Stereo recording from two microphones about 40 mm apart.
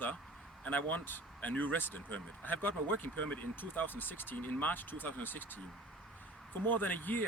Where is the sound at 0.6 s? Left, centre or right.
Left.